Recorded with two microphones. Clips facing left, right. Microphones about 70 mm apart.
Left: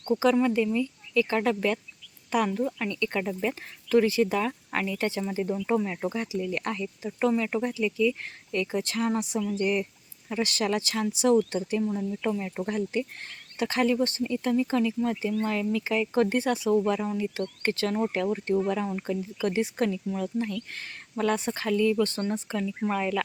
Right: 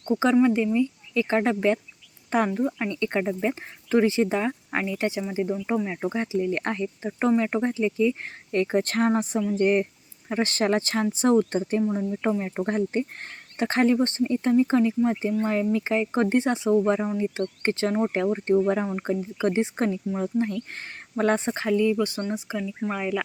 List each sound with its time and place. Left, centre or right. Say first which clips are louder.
0.4 s speech: right 3 dB; right
6.0 s speech: right 4 dB; right
8.6 s speech: right 6 dB; right; by 23.2 s centre